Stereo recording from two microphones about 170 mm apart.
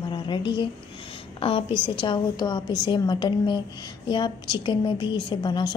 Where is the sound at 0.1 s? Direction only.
30° left (ahead or behind).